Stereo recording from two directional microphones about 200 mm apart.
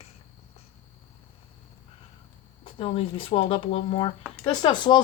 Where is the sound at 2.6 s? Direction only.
25° left (ahead or behind).